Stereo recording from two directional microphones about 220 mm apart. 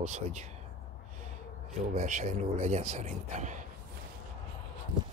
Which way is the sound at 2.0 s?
35° right (ahead or behind).